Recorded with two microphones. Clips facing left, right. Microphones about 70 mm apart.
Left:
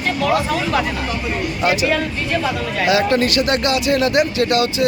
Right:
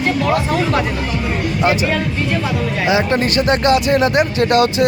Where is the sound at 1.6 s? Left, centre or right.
Right.